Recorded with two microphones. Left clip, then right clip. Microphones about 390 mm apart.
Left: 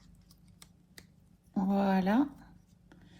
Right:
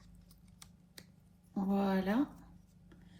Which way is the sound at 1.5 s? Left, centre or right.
Centre.